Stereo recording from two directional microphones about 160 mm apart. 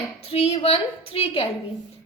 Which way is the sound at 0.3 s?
40° left (ahead or behind).